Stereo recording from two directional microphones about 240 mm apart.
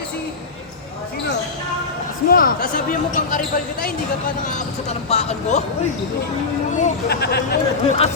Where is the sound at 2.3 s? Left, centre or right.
Left.